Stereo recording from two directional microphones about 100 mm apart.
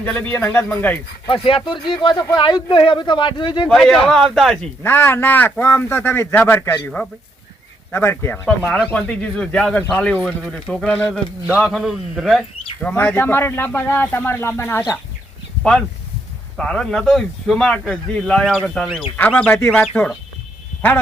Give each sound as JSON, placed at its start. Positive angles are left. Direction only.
{"t": 0.0, "sound": "speech", "side_deg": 15}
{"t": 1.3, "sound": "speech", "side_deg": 60}
{"t": 4.0, "sound": "a man's voice", "side_deg": 5}
{"t": 4.8, "sound": "speech", "side_deg": 20}
{"t": 8.4, "sound": "a man's voice", "side_deg": 10}
{"t": 12.8, "sound": "speech", "side_deg": 20}
{"t": 16.6, "sound": "a man's voice", "side_deg": 5}